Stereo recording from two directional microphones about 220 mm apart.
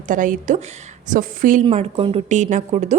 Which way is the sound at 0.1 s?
35° right (ahead or behind).